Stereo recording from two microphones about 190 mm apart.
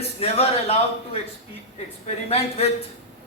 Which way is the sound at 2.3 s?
30° left (ahead or behind).